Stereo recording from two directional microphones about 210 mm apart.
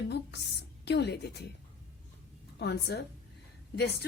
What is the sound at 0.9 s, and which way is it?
Speech, 55° left (ahead or behind).